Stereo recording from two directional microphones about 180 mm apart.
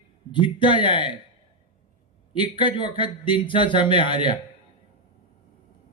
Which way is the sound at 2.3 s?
25° left (ahead or behind).